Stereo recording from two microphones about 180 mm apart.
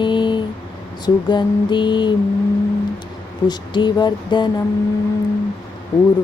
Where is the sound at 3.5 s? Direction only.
25° left (ahead or behind).